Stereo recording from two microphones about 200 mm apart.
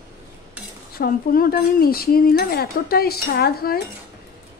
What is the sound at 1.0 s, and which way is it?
Speech, 45° left (ahead or behind).